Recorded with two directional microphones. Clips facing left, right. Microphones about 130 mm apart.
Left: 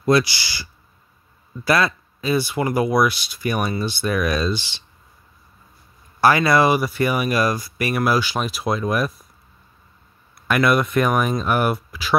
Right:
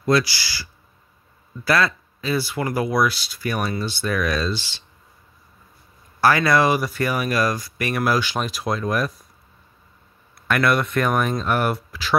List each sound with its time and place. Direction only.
0.0 s speech: 20° left (ahead or behind)
6.2 s speech: 15° left (ahead or behind)
10.5 s speech: 10° left (ahead or behind)